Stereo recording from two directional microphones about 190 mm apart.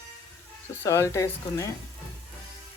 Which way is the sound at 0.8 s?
15° left (ahead or behind).